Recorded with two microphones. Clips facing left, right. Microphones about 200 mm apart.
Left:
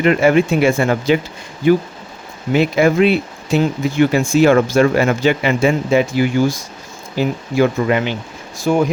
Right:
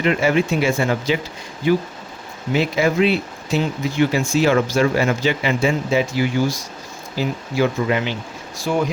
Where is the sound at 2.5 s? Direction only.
55° left (ahead or behind).